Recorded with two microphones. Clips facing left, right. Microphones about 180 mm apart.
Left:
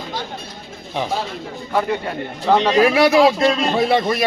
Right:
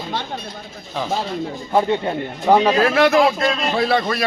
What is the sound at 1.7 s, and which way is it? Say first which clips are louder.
Speech: right 3 dB; 25° right (ahead or behind).